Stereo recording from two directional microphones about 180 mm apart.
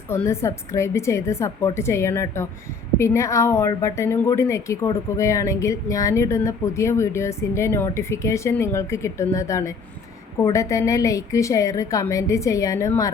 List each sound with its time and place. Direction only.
0.1 s speech: 15° left (ahead or behind)